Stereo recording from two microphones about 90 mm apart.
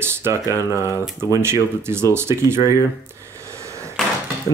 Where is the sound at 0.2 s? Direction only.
35° right (ahead or behind).